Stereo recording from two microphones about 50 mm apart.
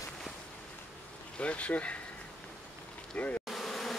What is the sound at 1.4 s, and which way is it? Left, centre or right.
Speech, left.